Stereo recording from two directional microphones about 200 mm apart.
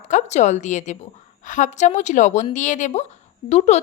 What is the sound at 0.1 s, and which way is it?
A woman's voice, 35° left (ahead or behind).